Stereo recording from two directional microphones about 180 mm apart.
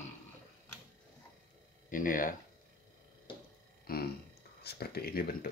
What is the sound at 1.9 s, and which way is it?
Speech, 50° left (ahead or behind).